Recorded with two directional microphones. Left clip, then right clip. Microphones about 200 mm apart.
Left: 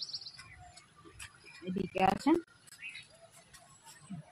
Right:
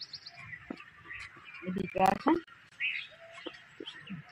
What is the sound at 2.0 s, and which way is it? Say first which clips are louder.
Speech: right 2 dB; 30° right (ahead or behind).